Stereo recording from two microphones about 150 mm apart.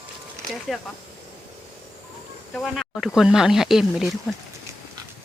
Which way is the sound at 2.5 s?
Centre (ahead or behind).